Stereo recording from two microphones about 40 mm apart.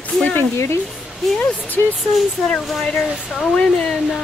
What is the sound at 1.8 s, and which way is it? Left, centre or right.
Speech, left.